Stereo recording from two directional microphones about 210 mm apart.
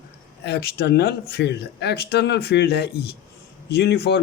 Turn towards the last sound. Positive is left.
turn(degrees=50)  # may be behind; listen again after turning